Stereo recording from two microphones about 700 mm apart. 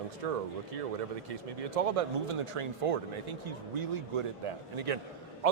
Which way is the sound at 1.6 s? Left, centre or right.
Right.